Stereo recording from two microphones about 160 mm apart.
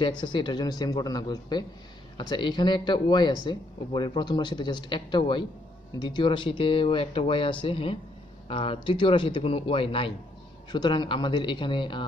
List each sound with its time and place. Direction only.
0.0 s speech: 30° left (ahead or behind)